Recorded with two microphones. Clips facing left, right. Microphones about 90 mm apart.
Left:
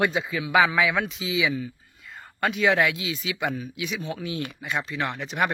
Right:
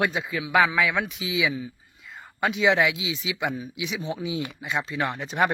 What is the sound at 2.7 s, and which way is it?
Speech, 5° right (ahead or behind).